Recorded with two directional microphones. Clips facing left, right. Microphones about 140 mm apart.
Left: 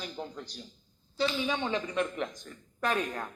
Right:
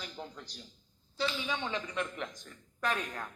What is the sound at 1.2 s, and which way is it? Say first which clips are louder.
Speech: left 5 dB; 15° left (ahead or behind).